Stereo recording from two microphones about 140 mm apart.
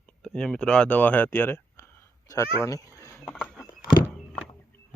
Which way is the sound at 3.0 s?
20° left (ahead or behind).